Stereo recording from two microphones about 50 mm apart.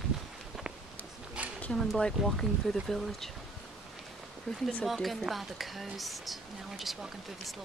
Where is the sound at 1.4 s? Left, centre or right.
Right.